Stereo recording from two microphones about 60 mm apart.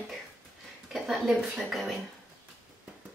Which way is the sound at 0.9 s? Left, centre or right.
Centre.